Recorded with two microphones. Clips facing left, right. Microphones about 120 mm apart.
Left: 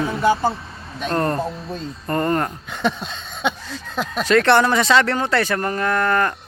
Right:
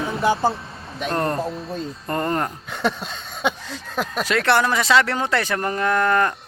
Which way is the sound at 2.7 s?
5° right (ahead or behind).